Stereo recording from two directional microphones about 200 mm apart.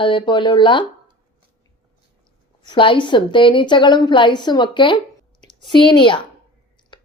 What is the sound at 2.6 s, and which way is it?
Speech, 25° left (ahead or behind).